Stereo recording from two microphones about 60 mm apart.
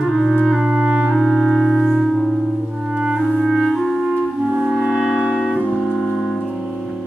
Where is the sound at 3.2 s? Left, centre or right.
Centre.